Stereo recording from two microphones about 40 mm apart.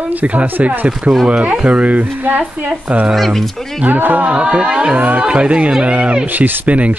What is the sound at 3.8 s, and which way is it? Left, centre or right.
Speech, right.